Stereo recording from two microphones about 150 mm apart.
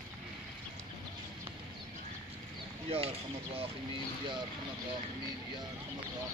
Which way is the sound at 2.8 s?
40° right (ahead or behind).